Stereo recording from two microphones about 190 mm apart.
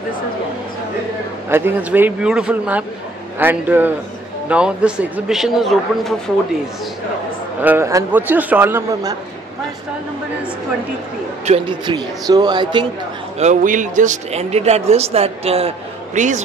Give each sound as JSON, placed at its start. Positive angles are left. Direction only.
{"t": 1.5, "sound": "a man's voice", "side_deg": -10}
{"t": 7.6, "sound": "a man's voice", "side_deg": -15}
{"t": 11.4, "sound": "a man's voice", "side_deg": -30}
{"t": 13.4, "sound": "speech", "side_deg": -40}